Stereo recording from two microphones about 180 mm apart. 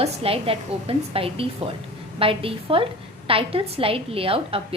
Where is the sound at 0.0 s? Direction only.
30° right (ahead or behind).